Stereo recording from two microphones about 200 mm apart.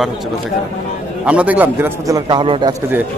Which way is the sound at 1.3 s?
5° right (ahead or behind).